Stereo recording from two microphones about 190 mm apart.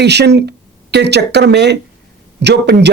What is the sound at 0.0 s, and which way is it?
Speech, 60° right (ahead or behind).